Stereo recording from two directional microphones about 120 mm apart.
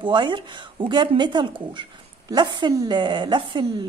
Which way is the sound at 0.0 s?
40° right (ahead or behind).